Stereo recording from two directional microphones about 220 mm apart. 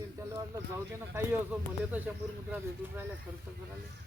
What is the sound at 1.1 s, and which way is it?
Speech, 10° right (ahead or behind).